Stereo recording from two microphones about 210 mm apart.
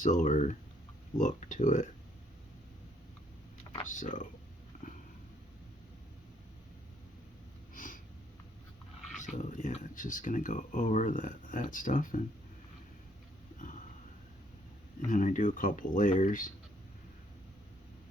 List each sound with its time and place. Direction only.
0.0 s speech: 35° left (ahead or behind)
3.8 s speech: 40° left (ahead or behind)
7.7 s a sound: 40° left (ahead or behind)
9.1 s speech: 35° left (ahead or behind)
15.0 s speech: 35° left (ahead or behind)